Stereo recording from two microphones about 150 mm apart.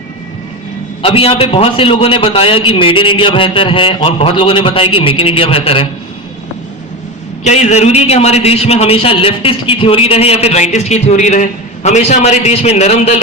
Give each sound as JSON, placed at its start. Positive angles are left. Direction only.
{"t": 1.0, "sound": "a man's voice", "side_deg": 40}
{"t": 7.4, "sound": "a man's voice", "side_deg": 50}